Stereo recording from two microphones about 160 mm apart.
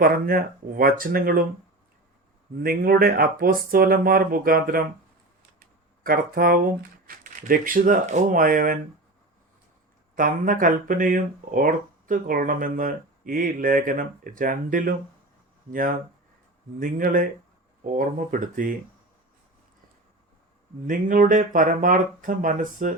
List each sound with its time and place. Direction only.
0.0 s speech: 65° right (ahead or behind)
2.6 s speech: 65° right (ahead or behind)
5.5 s a sound: 65° right (ahead or behind)
7.1 s speech: 60° right (ahead or behind)
10.2 s speech: 60° right (ahead or behind)
20.8 s speech: 60° right (ahead or behind)